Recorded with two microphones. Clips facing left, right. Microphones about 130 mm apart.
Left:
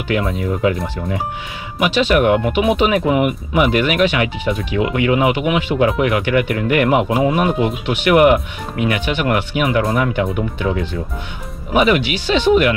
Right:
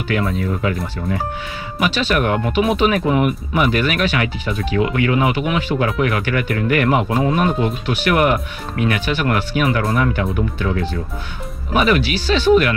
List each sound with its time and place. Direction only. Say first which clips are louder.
0.3 s speech: left 3 dB; 15° left (ahead or behind)
1.8 s speech: left 4 dB; 15° left (ahead or behind)